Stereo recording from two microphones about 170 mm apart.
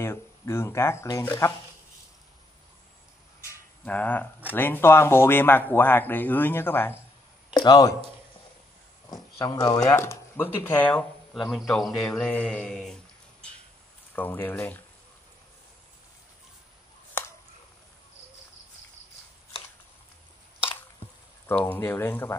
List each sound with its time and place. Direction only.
0.0 s speech: 15° left (ahead or behind)
3.8 s speech: 10° left (ahead or behind)
7.5 s speech: 25° left (ahead or behind)
9.1 s speech: 20° left (ahead or behind)
21.5 s speech: 10° left (ahead or behind)